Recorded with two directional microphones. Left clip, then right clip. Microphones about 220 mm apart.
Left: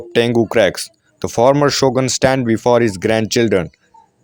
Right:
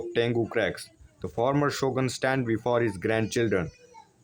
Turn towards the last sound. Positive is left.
turn(degrees=40)  # may be behind; listen again after turning